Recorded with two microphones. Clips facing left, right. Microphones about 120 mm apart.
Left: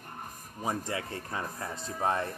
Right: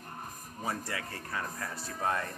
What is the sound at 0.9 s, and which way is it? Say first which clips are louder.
Speech: left 3 dB; 25° left (ahead or behind).